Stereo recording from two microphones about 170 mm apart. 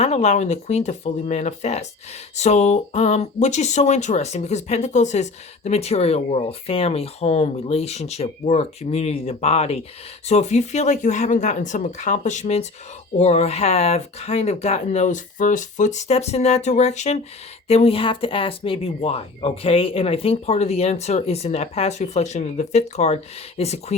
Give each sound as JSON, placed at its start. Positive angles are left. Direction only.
{"t": 0.0, "sound": "speech", "side_deg": 40}